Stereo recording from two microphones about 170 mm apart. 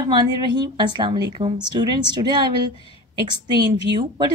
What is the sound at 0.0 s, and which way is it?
A woman's voice, 25° right (ahead or behind).